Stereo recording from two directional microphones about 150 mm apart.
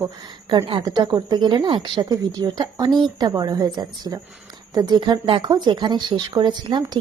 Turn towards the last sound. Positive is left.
turn(degrees=-30)  # may be behind; listen again after turning